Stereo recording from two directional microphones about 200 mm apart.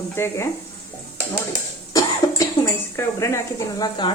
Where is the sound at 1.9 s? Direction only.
15° left (ahead or behind).